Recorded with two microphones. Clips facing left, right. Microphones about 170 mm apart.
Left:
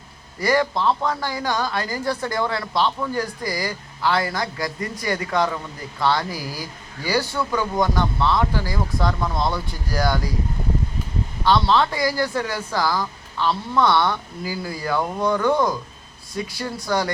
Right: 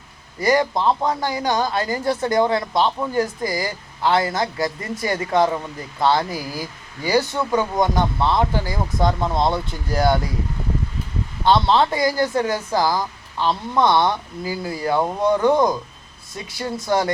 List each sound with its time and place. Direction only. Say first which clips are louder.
0.3 s a man's voice: right 2 dB; 20° right (ahead or behind)
11.4 s a man's voice: right 2 dB; 25° right (ahead or behind)